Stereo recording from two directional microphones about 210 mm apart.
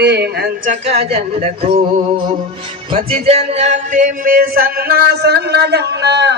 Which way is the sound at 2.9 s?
30° right (ahead or behind).